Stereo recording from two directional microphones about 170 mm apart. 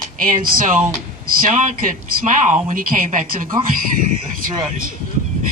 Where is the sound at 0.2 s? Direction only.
55° right (ahead or behind).